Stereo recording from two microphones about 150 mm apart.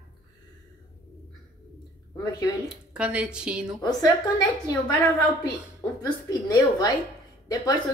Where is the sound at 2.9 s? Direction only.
10° right (ahead or behind).